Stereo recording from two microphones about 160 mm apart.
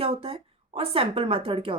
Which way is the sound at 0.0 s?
40° right (ahead or behind).